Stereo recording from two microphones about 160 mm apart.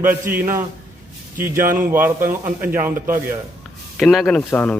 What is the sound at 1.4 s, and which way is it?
Speech, 55° right (ahead or behind).